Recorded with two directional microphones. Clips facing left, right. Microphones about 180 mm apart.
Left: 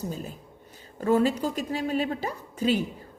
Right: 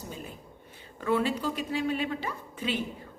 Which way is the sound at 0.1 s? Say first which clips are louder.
Left 5 dB; 40° left (ahead or behind).